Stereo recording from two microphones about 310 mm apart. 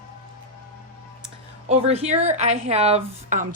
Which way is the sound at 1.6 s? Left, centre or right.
Centre.